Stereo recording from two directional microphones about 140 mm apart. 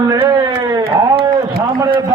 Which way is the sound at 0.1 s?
30° right (ahead or behind).